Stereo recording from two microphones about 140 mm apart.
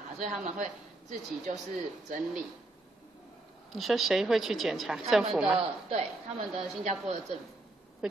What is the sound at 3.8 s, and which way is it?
Speech, centre (ahead or behind).